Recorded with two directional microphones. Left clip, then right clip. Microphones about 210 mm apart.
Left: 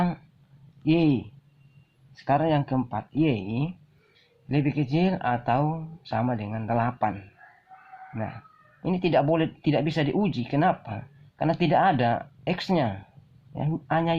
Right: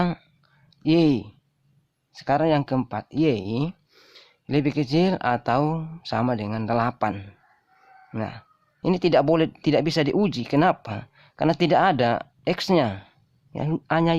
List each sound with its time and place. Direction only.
0.9 s speech: 40° right (ahead or behind)